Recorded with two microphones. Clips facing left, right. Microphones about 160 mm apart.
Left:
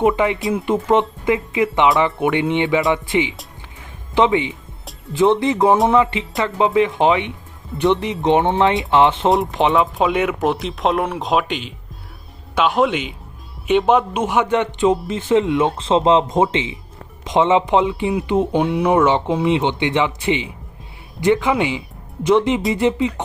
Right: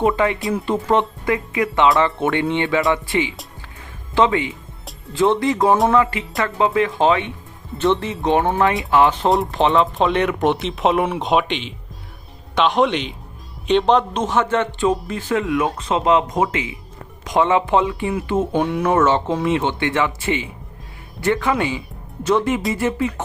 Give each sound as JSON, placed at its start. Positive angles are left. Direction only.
{"t": 0.2, "sound": "speech", "side_deg": 20}
{"t": 9.7, "sound": "speech", "side_deg": 5}